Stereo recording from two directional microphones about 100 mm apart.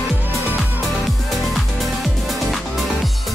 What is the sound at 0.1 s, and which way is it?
Music, 20° right (ahead or behind).